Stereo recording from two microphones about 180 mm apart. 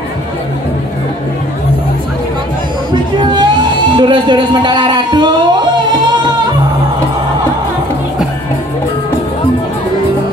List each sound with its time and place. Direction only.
2.9 s speech: 25° right (ahead or behind)